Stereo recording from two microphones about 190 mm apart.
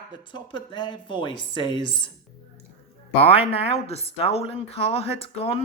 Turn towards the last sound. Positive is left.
turn(degrees=30)  # may be behind; listen again after turning